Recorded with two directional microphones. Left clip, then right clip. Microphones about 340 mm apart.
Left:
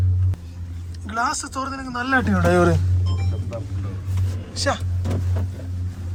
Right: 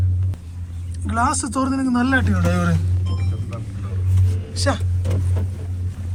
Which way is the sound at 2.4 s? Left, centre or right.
Left.